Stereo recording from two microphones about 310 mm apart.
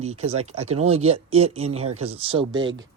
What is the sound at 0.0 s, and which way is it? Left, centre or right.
Speech, right.